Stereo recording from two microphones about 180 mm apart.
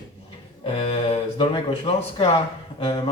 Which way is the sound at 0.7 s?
30° left (ahead or behind).